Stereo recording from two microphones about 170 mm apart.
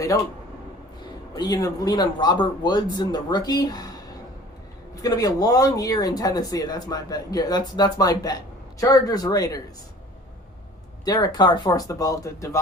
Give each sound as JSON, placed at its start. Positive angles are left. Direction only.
{"t": 1.4, "sound": "speech", "side_deg": 20}
{"t": 5.0, "sound": "speech", "side_deg": 20}
{"t": 11.0, "sound": "speech", "side_deg": 20}